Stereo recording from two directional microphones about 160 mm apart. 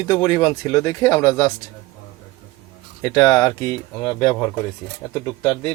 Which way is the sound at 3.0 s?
20° left (ahead or behind).